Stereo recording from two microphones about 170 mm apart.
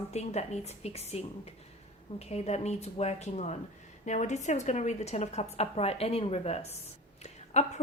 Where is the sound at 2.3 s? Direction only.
40° left (ahead or behind).